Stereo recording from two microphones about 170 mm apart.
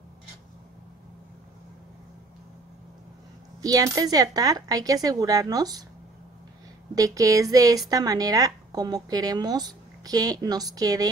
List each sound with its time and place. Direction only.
3.6 s speech: 20° right (ahead or behind)
7.0 s speech: 20° right (ahead or behind)